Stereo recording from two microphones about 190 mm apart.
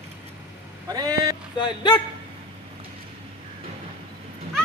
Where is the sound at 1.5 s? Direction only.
25° left (ahead or behind).